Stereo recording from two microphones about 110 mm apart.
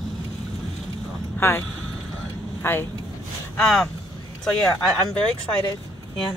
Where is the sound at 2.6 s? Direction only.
20° left (ahead or behind).